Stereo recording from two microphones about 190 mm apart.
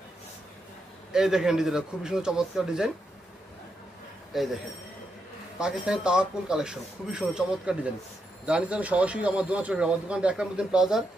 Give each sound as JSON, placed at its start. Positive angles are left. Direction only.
{"t": 1.1, "sound": "speech", "side_deg": -5}
{"t": 4.3, "sound": "speech", "side_deg": 0}
{"t": 5.6, "sound": "speech", "side_deg": -5}